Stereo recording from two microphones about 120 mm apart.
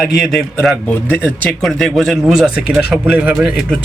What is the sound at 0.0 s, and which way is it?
Speech, centre (ahead or behind).